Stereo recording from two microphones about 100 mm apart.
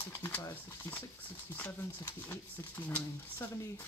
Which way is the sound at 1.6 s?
20° left (ahead or behind).